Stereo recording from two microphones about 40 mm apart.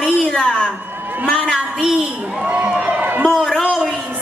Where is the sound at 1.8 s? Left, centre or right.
Centre.